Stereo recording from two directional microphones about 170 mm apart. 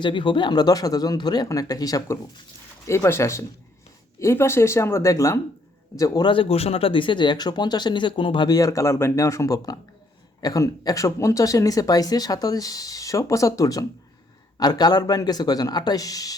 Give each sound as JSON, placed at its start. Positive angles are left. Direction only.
{"t": 0.0, "sound": "speech", "side_deg": 30}